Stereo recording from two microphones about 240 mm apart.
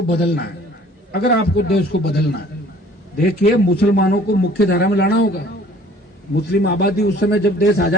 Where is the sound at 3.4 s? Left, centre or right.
Left.